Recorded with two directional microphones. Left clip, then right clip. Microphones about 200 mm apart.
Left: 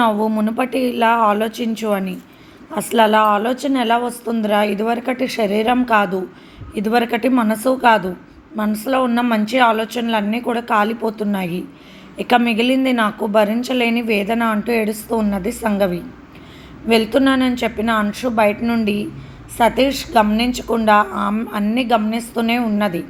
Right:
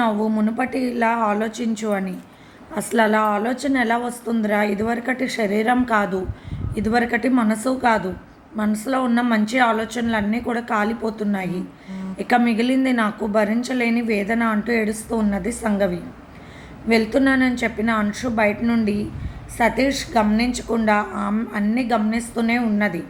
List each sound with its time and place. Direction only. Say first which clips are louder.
0.0 s a woman's voice: left 4 dB; 15° left (ahead or behind)
16.9 s a woman's voice: left 3 dB; 20° left (ahead or behind)